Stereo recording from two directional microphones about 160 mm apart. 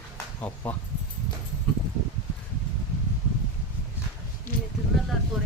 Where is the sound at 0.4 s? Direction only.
10° left (ahead or behind).